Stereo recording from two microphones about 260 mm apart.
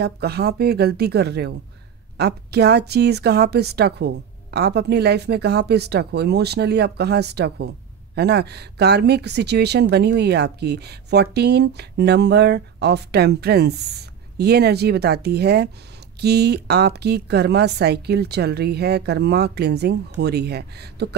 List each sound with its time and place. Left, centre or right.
0.0 s a woman's voice: right